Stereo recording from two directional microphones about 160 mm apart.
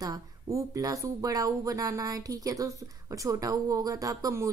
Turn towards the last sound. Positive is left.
turn(degrees=-20)  # may be behind; listen again after turning